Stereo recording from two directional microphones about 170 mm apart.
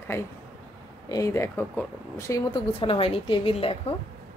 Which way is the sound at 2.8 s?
30° left (ahead or behind).